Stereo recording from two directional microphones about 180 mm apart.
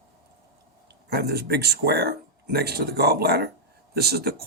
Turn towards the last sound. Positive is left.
turn(degrees=-60)  # may be behind; listen again after turning